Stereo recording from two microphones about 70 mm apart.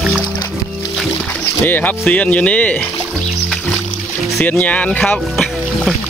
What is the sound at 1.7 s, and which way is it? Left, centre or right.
Speech, left.